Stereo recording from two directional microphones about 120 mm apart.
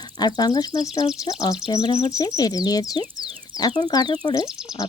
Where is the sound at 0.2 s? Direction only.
35° left (ahead or behind).